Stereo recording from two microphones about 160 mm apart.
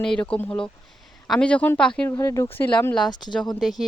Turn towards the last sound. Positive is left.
turn(degrees=0)  # may be behind; listen again after turning